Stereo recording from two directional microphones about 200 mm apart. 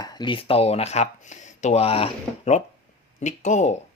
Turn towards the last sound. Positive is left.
turn(degrees=35)  # may be behind; listen again after turning